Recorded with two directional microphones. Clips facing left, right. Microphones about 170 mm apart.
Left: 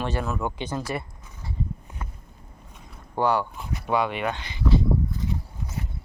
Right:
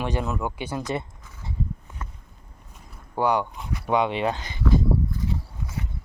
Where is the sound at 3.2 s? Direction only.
15° right (ahead or behind).